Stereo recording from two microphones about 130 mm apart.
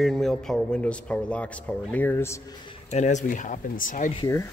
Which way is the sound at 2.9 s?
65° left (ahead or behind).